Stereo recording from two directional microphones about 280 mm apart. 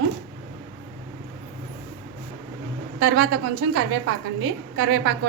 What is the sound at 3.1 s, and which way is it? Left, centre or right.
A woman's voice, right.